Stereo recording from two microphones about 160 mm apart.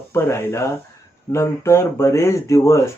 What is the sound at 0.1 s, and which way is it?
Speech, 15° left (ahead or behind).